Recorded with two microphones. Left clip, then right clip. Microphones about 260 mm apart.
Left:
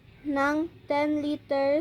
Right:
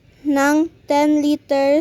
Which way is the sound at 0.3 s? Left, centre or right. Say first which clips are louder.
Right 10 dB; right.